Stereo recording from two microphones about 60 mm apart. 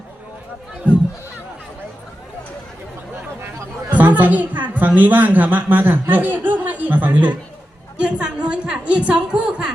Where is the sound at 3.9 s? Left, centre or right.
Right.